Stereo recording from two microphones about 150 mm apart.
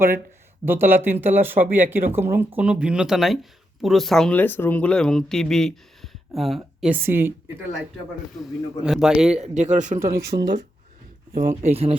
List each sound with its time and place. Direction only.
0.6 s speech: 15° right (ahead or behind)
6.8 s speech: 15° right (ahead or behind)
8.8 s speech: 5° right (ahead or behind)
9.4 s speech: 50° right (ahead or behind)
10.1 s speech: 80° right
11.3 s speech: 50° right (ahead or behind)